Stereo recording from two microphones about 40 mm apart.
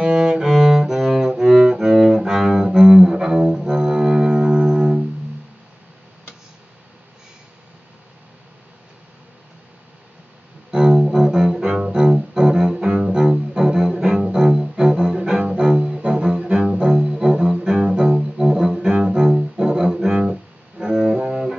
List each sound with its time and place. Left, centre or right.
0.0 s cello: right
10.7 s music: centre